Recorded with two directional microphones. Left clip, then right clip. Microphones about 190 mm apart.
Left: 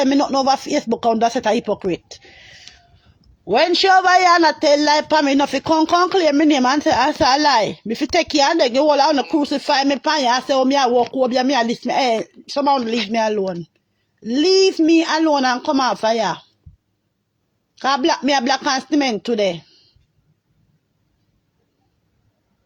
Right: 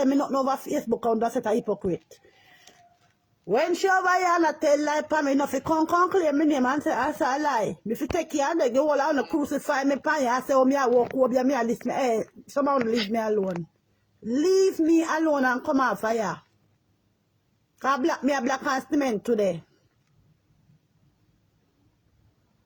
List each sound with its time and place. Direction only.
0.0 s speech: 40° left (ahead or behind)
3.8 s speech: 45° left (ahead or behind)
7.0 s speech: 30° left (ahead or behind)
9.2 s speech: 25° left (ahead or behind)
9.5 s speech: 40° left (ahead or behind)
17.7 s a man's voice: 40° left (ahead or behind)
18.5 s speech: 25° left (ahead or behind)
18.9 s speech: 40° left (ahead or behind)